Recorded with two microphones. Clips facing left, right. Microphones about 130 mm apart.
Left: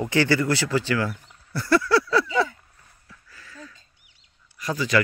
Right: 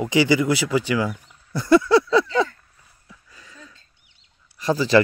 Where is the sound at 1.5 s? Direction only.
20° right (ahead or behind).